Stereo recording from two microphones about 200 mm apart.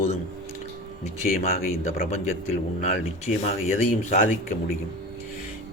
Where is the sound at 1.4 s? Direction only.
35° left (ahead or behind).